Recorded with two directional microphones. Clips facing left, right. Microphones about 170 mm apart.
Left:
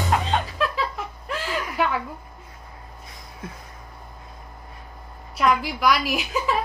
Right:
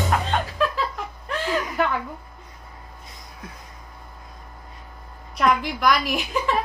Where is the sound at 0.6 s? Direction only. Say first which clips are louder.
Right 1 dB; centre (ahead or behind).